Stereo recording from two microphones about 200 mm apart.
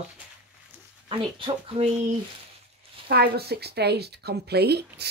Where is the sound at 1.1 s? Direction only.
25° right (ahead or behind).